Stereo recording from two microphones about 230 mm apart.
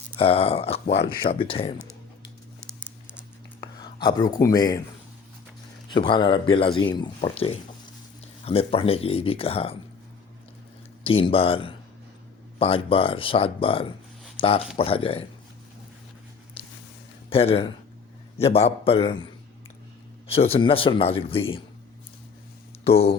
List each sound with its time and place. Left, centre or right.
0.2 s a man's voice: left
0.9 s speech: left
1.3 s a man's voice: left
3.6 s speech: centre
5.9 s a man's voice: left
11.0 s a man's voice: left
16.6 s a sound: left
17.2 s a man's voice: left
22.9 s a man's voice: left